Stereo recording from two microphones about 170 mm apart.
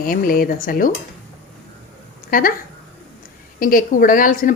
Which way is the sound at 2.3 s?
55° left (ahead or behind).